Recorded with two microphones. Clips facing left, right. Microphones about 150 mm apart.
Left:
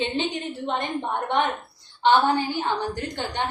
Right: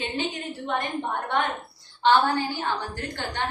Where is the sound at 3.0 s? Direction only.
20° left (ahead or behind).